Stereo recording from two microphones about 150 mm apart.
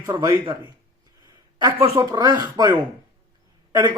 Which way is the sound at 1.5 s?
25° right (ahead or behind).